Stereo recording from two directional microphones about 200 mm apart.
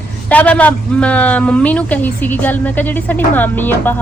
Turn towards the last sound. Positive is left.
turn(degrees=10)  # may be behind; listen again after turning